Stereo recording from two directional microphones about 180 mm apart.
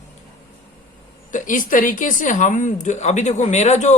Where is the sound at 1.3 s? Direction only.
45° left (ahead or behind).